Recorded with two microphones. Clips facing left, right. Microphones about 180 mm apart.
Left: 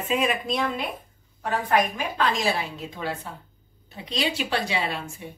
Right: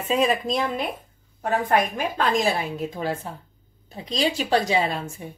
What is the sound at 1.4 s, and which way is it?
A woman's voice, 45° right (ahead or behind).